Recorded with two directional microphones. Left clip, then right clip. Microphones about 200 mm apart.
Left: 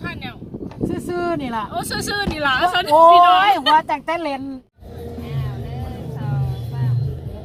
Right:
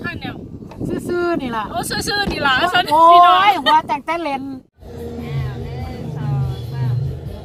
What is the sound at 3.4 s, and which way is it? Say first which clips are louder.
Speech: right 1 dB; 30° left (ahead or behind).